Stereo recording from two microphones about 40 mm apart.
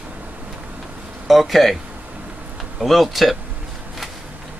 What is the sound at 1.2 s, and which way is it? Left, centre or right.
Speech, centre.